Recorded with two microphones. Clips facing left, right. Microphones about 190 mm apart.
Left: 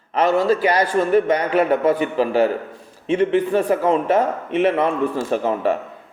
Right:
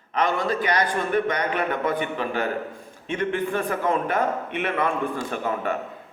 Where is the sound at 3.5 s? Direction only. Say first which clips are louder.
Left 7 dB; 35° left (ahead or behind).